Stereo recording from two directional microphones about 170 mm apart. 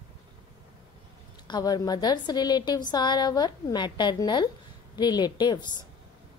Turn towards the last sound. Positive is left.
turn(degrees=25)  # may be behind; listen again after turning